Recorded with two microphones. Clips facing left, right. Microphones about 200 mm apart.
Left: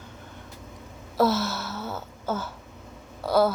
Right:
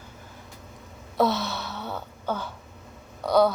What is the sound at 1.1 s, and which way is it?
Gasp, centre (ahead or behind).